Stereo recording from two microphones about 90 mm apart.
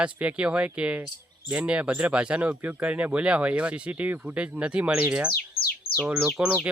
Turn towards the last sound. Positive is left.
turn(degrees=-5)  # may be behind; listen again after turning